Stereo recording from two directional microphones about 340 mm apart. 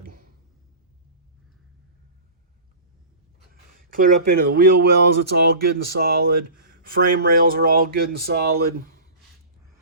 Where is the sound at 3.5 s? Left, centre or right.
Right.